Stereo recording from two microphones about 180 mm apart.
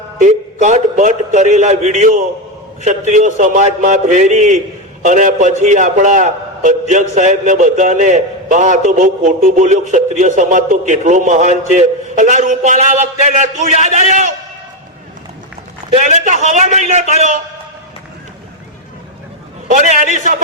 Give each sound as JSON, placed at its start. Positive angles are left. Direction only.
{"t": 0.2, "sound": "a man's voice", "side_deg": -40}
{"t": 15.9, "sound": "a man's voice", "side_deg": -40}
{"t": 19.7, "sound": "a man's voice", "side_deg": -45}